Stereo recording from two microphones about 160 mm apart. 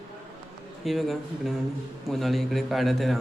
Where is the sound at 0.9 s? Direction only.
Centre (ahead or behind).